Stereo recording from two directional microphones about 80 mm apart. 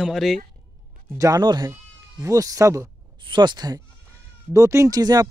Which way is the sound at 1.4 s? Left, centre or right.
Right.